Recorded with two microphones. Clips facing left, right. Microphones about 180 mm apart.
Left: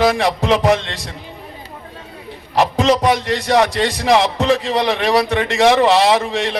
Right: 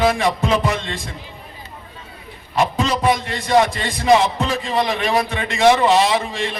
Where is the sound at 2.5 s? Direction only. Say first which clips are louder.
Left 5 dB; 75° left (ahead or behind).